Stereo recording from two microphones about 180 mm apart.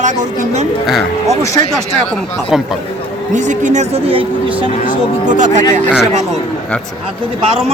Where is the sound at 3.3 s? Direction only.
45° right (ahead or behind).